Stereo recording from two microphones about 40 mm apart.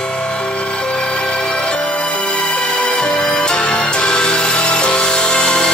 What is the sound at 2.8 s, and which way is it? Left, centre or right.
Music, left.